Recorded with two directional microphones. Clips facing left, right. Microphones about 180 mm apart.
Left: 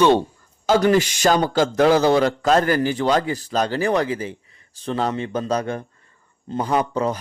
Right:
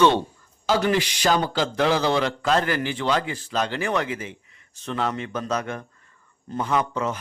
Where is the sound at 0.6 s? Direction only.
45° left (ahead or behind).